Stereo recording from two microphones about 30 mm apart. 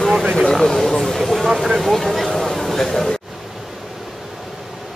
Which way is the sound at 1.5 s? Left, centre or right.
Centre.